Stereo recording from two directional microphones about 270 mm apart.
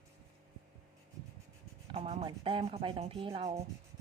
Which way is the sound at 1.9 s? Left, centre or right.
Right.